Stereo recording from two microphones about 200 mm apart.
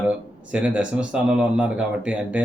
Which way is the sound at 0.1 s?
5° right (ahead or behind).